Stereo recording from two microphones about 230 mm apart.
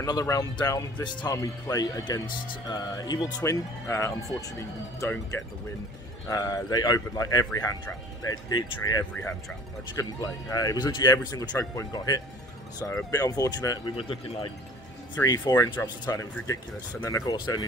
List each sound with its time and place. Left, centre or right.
0.0 s a man's voice: centre
9.1 s a man's voice: centre